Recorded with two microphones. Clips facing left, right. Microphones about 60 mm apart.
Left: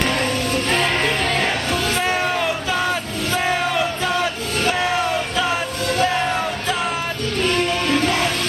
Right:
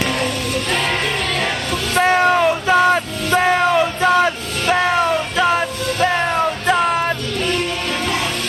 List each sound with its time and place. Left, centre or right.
0.2 s music: left
2.0 s a sound: right
4.0 s music: right